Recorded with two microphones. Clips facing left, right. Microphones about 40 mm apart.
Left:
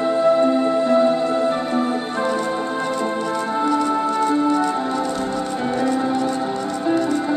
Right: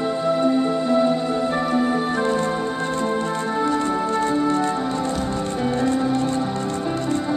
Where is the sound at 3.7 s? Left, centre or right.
Right.